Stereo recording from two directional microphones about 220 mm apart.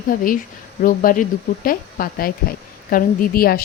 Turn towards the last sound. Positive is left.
turn(degrees=40)  # may be behind; listen again after turning